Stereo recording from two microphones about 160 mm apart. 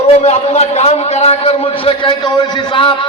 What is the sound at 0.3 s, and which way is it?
A man's voice, 45° left (ahead or behind).